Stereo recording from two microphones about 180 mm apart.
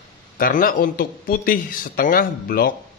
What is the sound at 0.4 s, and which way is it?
Speech, 50° left (ahead or behind).